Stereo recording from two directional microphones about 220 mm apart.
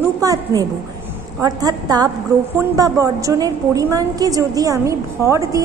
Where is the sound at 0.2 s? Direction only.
15° right (ahead or behind).